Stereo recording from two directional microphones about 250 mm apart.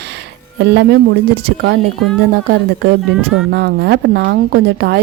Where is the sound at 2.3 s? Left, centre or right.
Right.